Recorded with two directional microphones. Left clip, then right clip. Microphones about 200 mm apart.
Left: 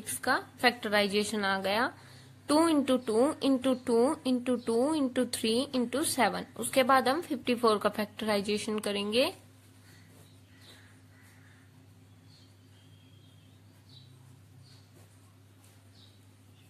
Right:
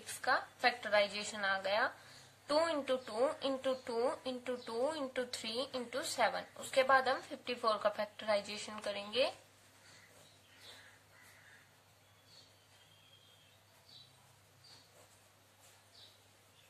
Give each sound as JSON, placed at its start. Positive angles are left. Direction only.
{"t": 0.2, "sound": "a woman's voice", "side_deg": 40}